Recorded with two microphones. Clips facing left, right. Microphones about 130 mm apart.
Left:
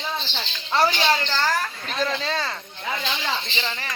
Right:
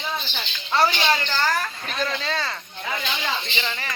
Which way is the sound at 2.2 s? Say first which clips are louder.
Left 1 dB; 15° left (ahead or behind).